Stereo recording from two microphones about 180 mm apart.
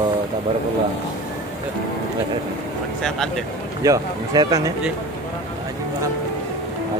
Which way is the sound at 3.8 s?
20° right (ahead or behind).